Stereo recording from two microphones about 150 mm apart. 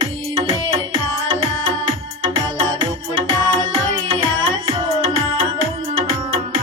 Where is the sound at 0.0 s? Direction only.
35° right (ahead or behind).